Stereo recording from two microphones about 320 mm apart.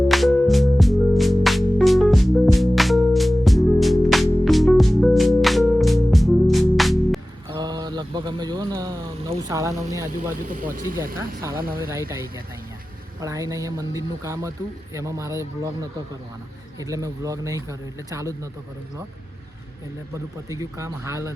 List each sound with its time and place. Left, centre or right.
0.1 s music: centre
7.5 s a sound: centre
10.5 s speech: right
11.9 s speech: centre
20.1 s speech: centre